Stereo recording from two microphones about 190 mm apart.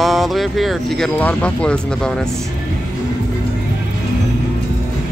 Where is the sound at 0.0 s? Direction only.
Centre (ahead or behind).